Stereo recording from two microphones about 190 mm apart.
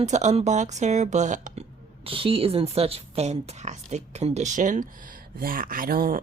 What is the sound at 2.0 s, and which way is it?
A woman's voice, 30° right (ahead or behind).